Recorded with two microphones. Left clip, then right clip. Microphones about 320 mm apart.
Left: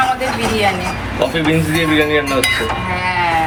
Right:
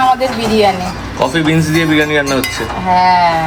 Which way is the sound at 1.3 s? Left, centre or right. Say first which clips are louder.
Right 3 dB; right.